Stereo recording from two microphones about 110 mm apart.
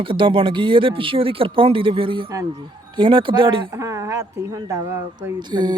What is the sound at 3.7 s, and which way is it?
Speech, 30° right (ahead or behind).